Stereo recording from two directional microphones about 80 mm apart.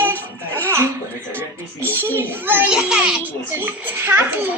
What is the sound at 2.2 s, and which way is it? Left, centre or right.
Speech, right.